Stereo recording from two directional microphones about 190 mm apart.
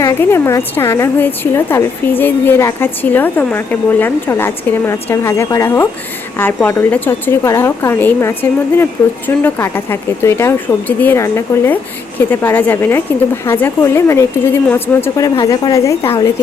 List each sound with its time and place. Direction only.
0.0 s a woman's voice: 15° left (ahead or behind)